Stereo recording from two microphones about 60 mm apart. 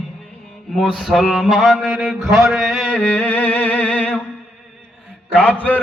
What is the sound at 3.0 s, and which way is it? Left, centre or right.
Music, left.